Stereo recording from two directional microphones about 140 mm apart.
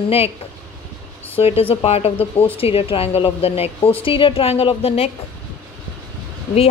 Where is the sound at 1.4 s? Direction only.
45° left (ahead or behind).